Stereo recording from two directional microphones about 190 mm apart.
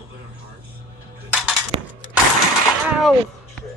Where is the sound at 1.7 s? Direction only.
30° right (ahead or behind).